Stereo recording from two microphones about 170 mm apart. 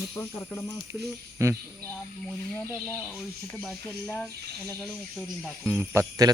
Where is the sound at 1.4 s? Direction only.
15° right (ahead or behind).